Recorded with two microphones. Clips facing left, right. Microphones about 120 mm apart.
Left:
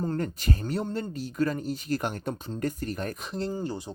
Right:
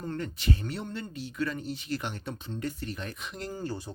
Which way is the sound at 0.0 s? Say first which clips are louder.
Left 5 dB; 40° left (ahead or behind).